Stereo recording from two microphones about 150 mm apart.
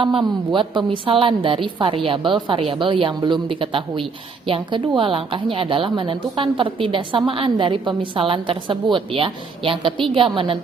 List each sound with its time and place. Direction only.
0.5 s a woman's voice: 30° right (ahead or behind)